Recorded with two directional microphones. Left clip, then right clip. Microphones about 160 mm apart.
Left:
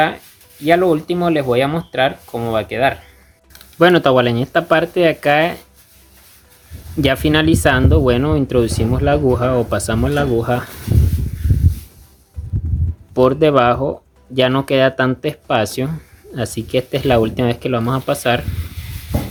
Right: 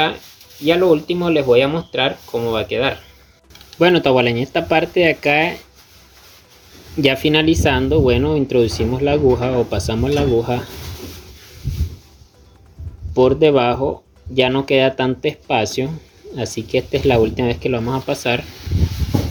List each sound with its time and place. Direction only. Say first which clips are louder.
0.6 s speech: even; 40° left (ahead or behind)
7.0 s speech: even; 35° left (ahead or behind)
13.1 s speech: left 1 dB; 35° left (ahead or behind)